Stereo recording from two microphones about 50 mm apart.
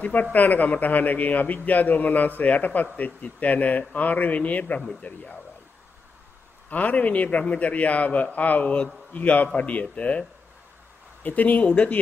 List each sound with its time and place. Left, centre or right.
0.0 s a man's voice: left
6.7 s a man's voice: left
11.2 s a man's voice: left